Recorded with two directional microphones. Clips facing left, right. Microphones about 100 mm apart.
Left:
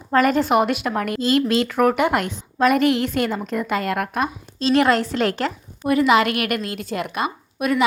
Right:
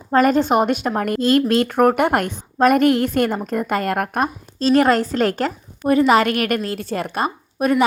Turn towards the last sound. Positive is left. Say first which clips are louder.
# right 3 dB
turn(degrees=-40)  # may be behind; listen again after turning